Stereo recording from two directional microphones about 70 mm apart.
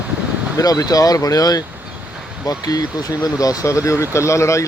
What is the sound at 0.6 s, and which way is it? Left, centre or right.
Speech, left.